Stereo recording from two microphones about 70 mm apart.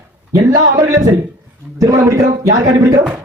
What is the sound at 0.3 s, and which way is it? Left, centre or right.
Speech, right.